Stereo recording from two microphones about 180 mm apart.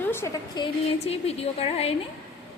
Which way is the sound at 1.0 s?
35° left (ahead or behind).